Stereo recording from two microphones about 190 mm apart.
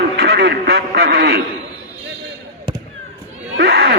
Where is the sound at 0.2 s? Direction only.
60° right (ahead or behind).